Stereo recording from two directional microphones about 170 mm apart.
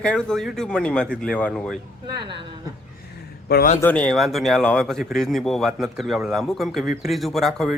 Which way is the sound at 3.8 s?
5° left (ahead or behind).